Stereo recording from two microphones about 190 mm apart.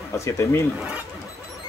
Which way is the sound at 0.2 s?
15° left (ahead or behind).